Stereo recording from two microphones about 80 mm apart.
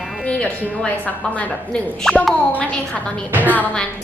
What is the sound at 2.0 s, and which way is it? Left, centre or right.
Speech, centre.